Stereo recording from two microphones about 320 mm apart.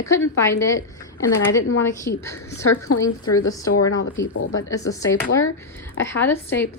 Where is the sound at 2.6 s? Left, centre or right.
Left.